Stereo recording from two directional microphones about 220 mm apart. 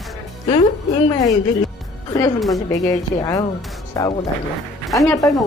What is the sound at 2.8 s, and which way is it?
A man's voice, 15° left (ahead or behind).